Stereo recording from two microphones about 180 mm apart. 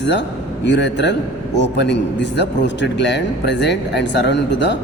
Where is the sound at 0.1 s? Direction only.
75° left (ahead or behind).